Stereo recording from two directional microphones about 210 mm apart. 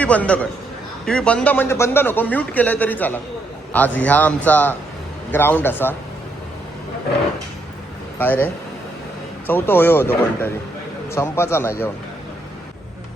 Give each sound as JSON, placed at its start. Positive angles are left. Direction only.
{"t": 0.0, "sound": "a man's voice", "side_deg": 5}
{"t": 8.2, "sound": "a man's voice", "side_deg": 10}
{"t": 9.5, "sound": "a man's voice", "side_deg": 10}